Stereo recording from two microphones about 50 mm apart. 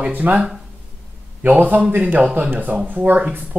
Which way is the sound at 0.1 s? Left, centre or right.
Right.